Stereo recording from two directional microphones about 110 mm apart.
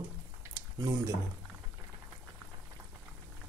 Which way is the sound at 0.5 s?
30° right (ahead or behind).